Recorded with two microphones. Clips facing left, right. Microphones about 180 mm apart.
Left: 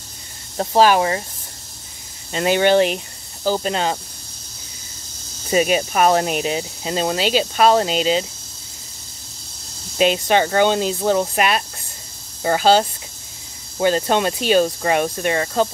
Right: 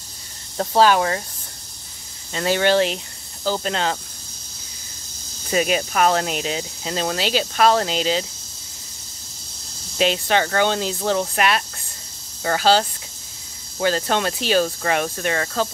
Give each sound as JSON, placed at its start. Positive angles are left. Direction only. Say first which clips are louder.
{"t": 0.6, "sound": "speech", "louder": "left 2 dB", "side_deg": 15}
{"t": 2.3, "sound": "speech", "louder": "left 3 dB", "side_deg": 20}
{"t": 5.5, "sound": "speech", "louder": "left 3 dB", "side_deg": 20}
{"t": 9.9, "sound": "speech", "louder": "left 3 dB", "side_deg": 15}